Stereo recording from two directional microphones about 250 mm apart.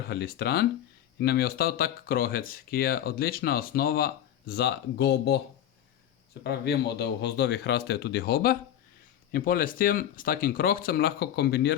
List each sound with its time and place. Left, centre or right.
0.1 s speech: left
6.4 s speech: left